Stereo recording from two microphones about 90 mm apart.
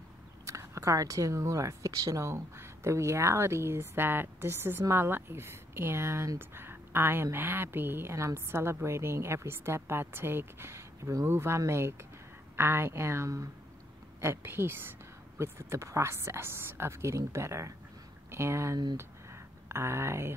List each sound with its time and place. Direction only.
0.5 s speech: 35° right (ahead or behind)